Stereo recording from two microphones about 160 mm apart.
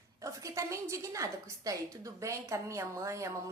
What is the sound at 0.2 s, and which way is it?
A woman's voice, 20° right (ahead or behind).